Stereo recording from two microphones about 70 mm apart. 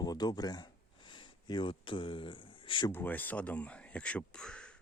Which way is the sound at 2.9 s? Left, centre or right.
Left.